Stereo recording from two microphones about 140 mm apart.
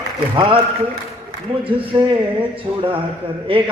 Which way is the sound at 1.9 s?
30° right (ahead or behind).